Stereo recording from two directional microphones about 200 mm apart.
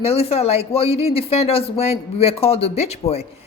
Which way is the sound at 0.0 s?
30° left (ahead or behind).